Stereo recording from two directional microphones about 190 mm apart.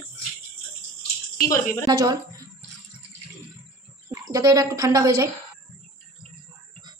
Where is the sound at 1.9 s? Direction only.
25° right (ahead or behind).